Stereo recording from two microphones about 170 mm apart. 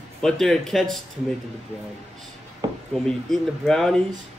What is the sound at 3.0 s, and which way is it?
Speech, centre (ahead or behind).